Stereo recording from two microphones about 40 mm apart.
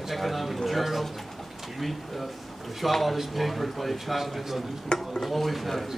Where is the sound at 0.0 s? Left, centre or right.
Centre.